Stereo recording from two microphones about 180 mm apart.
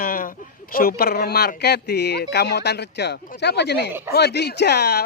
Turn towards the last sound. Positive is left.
turn(degrees=65)  # may be behind; listen again after turning